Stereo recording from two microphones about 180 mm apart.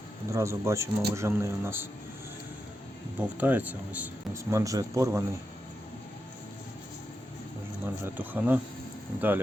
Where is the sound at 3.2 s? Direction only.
10° right (ahead or behind).